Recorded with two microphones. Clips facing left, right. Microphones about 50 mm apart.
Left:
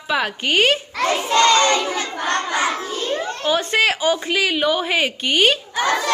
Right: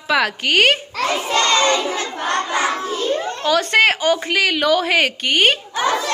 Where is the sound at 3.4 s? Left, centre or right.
Right.